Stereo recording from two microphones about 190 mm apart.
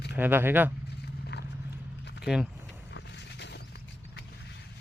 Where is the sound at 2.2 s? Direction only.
5° right (ahead or behind).